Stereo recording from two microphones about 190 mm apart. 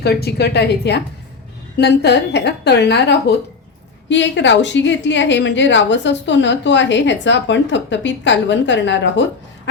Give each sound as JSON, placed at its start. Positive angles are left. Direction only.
{"t": 0.0, "sound": "a woman's voice", "side_deg": 55}